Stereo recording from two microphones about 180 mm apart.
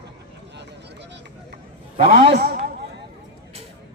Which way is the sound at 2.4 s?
55° right (ahead or behind).